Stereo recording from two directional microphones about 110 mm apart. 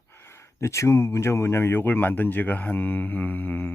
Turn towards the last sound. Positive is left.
turn(degrees=15)  # may be behind; listen again after turning